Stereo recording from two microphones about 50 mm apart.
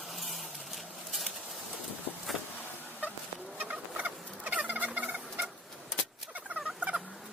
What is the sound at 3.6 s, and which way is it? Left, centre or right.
Fowl, right.